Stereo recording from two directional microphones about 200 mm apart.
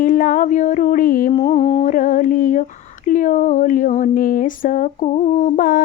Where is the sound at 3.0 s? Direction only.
40° left (ahead or behind).